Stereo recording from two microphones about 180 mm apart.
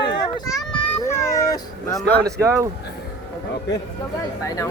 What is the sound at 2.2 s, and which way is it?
Speech, 15° right (ahead or behind).